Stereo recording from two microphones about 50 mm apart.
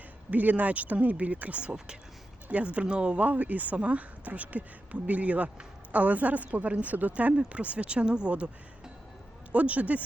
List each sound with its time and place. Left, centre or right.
0.3 s speech: right
9.5 s speech: right